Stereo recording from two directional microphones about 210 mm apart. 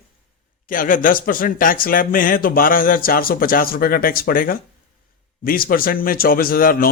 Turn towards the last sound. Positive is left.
turn(degrees=45)  # may be behind; listen again after turning